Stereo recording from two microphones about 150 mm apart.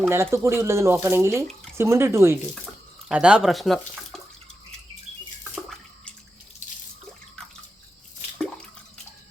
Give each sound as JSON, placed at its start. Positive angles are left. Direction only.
{"t": 0.1, "sound": "speech", "side_deg": -15}
{"t": 3.1, "sound": "speech", "side_deg": -5}
{"t": 5.5, "sound": "bathtub", "side_deg": 5}